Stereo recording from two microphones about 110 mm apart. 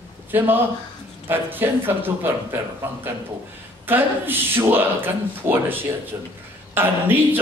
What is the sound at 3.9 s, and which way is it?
Speech, 20° right (ahead or behind).